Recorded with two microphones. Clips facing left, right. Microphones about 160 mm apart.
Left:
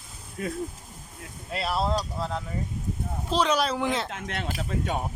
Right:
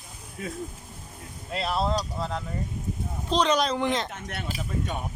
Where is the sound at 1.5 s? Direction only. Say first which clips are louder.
Even; centre (ahead or behind).